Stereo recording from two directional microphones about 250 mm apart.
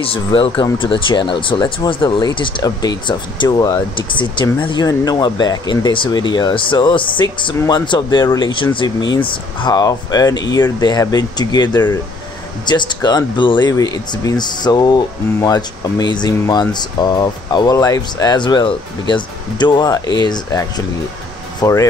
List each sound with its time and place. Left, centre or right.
0.0 s speech: left